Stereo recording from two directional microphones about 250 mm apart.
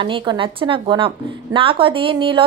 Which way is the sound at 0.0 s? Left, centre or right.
Centre.